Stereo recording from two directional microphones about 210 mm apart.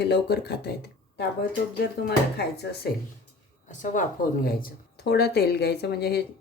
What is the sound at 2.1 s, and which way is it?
Speech, 50° left (ahead or behind).